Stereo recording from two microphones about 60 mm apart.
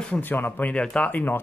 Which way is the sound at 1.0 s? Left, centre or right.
Left.